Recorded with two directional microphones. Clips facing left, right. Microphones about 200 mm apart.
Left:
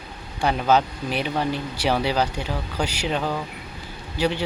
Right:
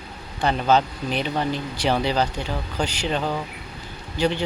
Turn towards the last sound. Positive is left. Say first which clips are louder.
# right 1 dB
turn(degrees=5)  # may be behind; listen again after turning